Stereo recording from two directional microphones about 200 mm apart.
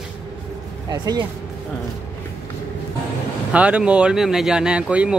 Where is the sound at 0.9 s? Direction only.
20° right (ahead or behind).